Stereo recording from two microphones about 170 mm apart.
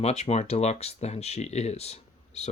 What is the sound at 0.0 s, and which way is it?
Speech, 40° left (ahead or behind).